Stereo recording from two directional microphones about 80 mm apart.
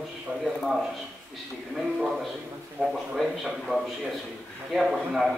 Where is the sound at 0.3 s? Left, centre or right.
Centre.